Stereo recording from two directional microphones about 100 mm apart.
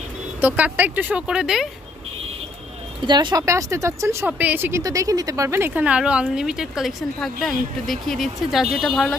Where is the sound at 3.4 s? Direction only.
30° right (ahead or behind).